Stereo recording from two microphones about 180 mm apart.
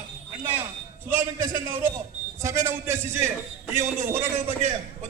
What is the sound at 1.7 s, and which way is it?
A man's voice, 10° right (ahead or behind).